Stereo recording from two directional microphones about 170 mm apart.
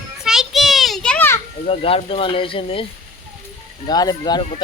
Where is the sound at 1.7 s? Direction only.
35° left (ahead or behind).